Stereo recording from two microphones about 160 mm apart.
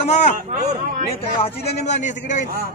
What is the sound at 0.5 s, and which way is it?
Speech, 55° right (ahead or behind).